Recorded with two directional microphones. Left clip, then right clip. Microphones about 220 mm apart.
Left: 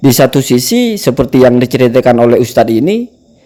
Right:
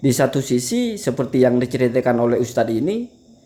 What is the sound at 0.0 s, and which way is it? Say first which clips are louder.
Speech: left 10 dB; 35° left (ahead or behind).